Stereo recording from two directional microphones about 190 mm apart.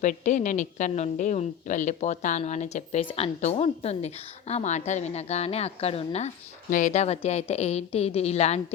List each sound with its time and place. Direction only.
0.0 s a woman's voice: 40° left (ahead or behind)